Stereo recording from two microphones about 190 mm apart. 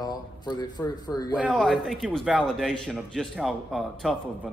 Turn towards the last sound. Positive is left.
turn(degrees=0)  # may be behind; listen again after turning